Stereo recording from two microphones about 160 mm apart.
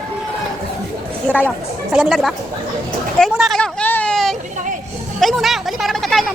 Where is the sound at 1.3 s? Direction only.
10° right (ahead or behind).